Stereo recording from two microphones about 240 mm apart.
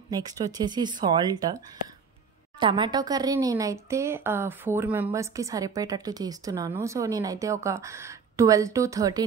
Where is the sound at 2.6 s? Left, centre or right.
Centre.